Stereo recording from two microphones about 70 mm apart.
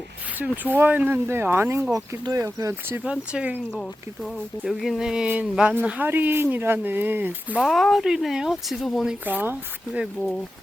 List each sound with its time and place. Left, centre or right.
0.3 s speech: right
2.4 s speech: right
3.0 s speech: centre
3.8 s speech: centre
5.8 s speech: right
7.6 s speech: centre
9.2 s speech: right